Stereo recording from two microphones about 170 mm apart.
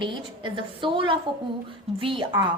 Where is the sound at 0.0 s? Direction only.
30° right (ahead or behind).